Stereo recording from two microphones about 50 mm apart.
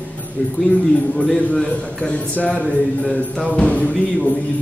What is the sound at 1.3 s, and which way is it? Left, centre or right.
Speech, centre.